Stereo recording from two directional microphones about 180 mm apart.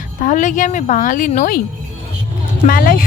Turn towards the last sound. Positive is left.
turn(degrees=55)  # may be behind; listen again after turning